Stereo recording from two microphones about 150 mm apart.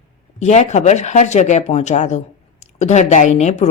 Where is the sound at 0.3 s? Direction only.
50° left (ahead or behind).